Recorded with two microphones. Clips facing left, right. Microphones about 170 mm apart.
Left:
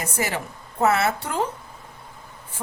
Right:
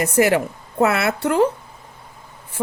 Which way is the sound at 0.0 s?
65° right (ahead or behind).